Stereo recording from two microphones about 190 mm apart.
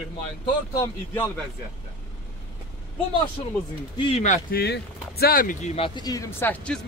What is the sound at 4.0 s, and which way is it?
Speech, 30° left (ahead or behind).